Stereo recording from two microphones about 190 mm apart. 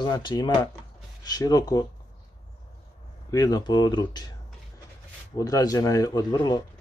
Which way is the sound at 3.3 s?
20° left (ahead or behind).